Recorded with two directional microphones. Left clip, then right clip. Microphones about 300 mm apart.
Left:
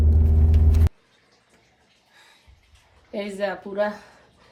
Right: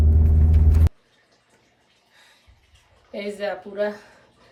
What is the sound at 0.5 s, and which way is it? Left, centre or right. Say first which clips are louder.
Gong: even; centre.